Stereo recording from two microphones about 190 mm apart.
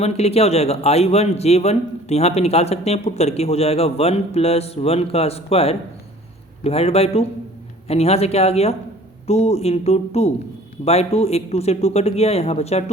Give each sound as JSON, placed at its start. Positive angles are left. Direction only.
{"t": 0.0, "sound": "a man's voice", "side_deg": 35}